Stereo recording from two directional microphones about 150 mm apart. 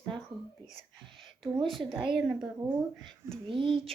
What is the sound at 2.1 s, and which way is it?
Speech, 5° right (ahead or behind).